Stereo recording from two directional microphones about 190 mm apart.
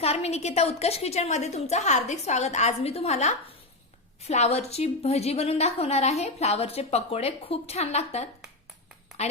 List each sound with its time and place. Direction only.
0.0 s a woman's voice: 35° left (ahead or behind)